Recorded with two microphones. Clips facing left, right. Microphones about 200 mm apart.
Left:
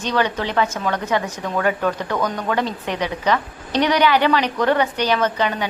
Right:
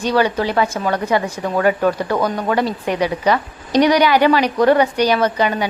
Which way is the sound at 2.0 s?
35° right (ahead or behind).